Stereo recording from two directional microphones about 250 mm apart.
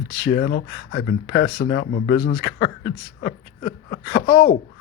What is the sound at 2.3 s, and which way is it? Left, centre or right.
Speech, left.